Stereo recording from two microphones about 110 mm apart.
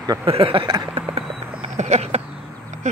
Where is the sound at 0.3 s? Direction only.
55° right (ahead or behind).